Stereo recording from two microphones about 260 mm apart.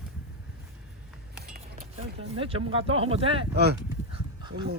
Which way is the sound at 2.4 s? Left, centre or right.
Right.